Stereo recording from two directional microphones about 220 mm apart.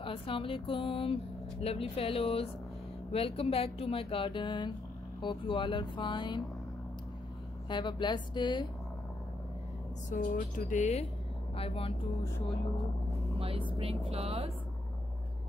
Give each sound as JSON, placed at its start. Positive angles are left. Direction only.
{"t": 0.0, "sound": "speech", "side_deg": 25}
{"t": 7.7, "sound": "speech", "side_deg": 20}
{"t": 10.0, "sound": "speech", "side_deg": 35}
{"t": 13.4, "sound": "speech", "side_deg": -25}